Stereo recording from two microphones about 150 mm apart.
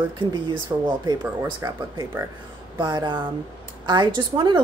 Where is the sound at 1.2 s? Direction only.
15° right (ahead or behind).